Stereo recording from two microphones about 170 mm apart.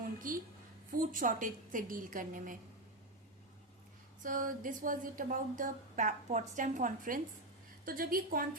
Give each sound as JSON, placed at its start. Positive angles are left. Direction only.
{"t": 0.0, "sound": "a sound", "side_deg": -55}
{"t": 0.9, "sound": "a woman's voice", "side_deg": -50}
{"t": 4.2, "sound": "a woman's voice", "side_deg": -50}